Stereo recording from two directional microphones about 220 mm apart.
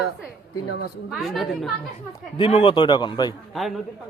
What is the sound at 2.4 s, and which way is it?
Speech, 25° left (ahead or behind).